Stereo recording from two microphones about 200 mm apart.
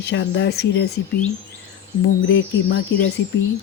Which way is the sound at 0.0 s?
65° left (ahead or behind).